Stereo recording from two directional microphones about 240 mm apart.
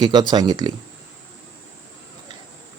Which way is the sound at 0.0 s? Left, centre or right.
Centre.